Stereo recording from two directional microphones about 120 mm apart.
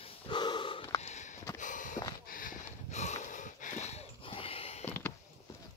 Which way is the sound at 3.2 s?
90° left.